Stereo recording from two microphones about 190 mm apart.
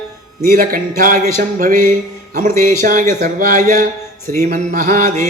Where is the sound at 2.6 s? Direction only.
50° right (ahead or behind).